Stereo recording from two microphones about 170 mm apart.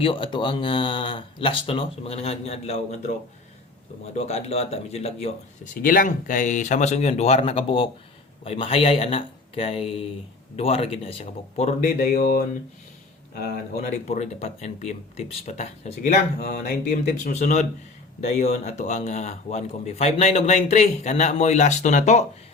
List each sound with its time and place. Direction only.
0.0 s a man's voice: 30° left (ahead or behind)
4.3 s a man's voice: 40° left (ahead or behind)
5.8 s a man's voice: 55° left (ahead or behind)
12.1 s speech: 60° left (ahead or behind)
13.8 s a man's voice: 45° left (ahead or behind)
16.6 s a man's voice: 55° left (ahead or behind)